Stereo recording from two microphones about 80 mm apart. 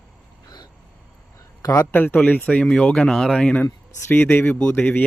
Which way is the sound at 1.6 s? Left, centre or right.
Left.